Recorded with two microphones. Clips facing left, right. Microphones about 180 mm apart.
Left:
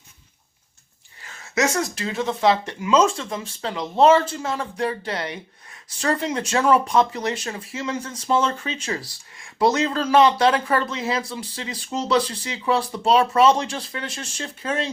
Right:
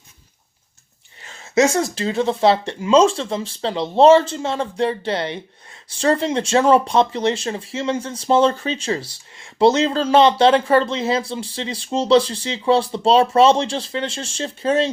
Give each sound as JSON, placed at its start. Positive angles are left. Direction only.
{"t": 1.2, "sound": "speech", "side_deg": -25}